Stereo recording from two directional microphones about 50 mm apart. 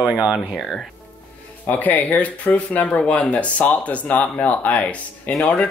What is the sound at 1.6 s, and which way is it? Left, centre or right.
Speech, left.